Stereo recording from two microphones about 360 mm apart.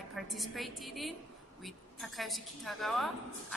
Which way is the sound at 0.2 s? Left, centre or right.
Centre.